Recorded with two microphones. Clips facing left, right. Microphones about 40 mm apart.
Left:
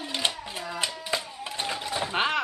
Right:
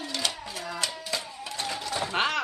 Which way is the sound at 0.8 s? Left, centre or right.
Left.